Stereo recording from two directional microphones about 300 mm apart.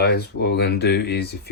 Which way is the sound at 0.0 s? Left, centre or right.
Left.